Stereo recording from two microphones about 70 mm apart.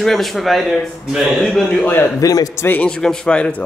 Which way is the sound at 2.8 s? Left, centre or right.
Centre.